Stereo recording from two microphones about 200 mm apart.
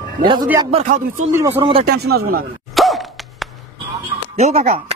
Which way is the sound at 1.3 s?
10° right (ahead or behind).